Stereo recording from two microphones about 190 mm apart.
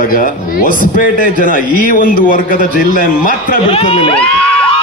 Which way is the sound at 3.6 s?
30° left (ahead or behind).